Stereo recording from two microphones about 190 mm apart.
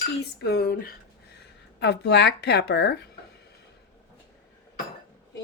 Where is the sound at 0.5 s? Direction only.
55° left (ahead or behind).